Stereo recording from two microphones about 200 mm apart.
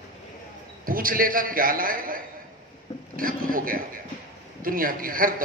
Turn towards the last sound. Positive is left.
turn(degrees=-45)  # may be behind; listen again after turning